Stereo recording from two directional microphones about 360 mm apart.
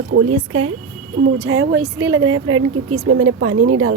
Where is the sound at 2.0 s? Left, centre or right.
Right.